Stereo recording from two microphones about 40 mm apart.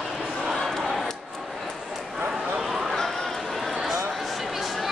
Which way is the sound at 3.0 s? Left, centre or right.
Centre.